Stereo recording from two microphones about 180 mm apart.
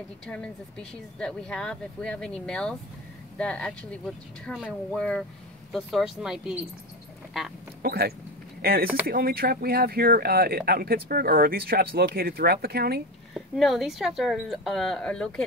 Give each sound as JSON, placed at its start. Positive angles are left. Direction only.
{"t": 0.3, "sound": "speech", "side_deg": 5}
{"t": 7.8, "sound": "speech", "side_deg": -60}
{"t": 13.3, "sound": "speech", "side_deg": 0}